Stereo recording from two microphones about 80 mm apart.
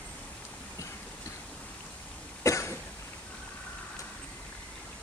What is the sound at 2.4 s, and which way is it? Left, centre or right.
Cough, left.